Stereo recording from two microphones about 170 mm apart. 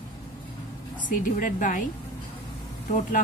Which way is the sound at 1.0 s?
50° left (ahead or behind).